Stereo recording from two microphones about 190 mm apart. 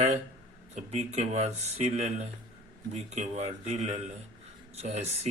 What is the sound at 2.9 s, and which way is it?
Speech, 35° right (ahead or behind).